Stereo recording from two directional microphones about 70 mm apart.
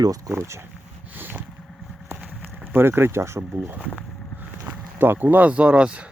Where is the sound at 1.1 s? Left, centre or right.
Right.